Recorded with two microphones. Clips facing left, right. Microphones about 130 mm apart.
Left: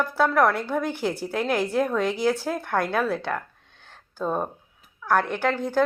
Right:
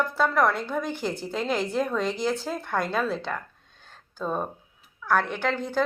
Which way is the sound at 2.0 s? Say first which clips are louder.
Left 3 dB; 60° left (ahead or behind).